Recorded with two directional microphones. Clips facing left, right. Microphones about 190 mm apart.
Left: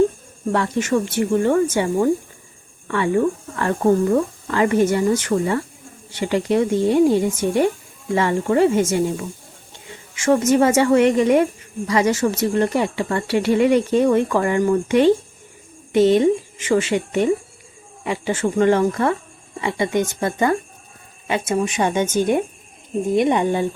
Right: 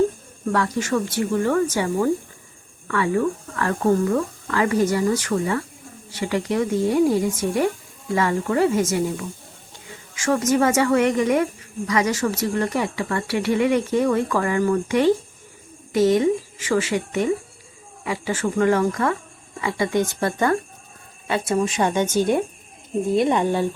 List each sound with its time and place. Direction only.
0.5 s speech: 25° left (ahead or behind)
23.1 s speech: 20° left (ahead or behind)